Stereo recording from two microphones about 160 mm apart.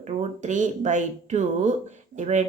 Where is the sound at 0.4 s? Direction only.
50° right (ahead or behind).